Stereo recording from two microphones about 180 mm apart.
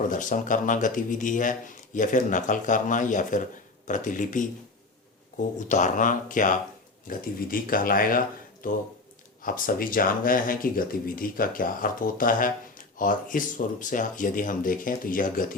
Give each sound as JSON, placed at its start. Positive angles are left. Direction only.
{"t": 0.1, "sound": "speech", "side_deg": 45}
{"t": 5.5, "sound": "speech", "side_deg": 45}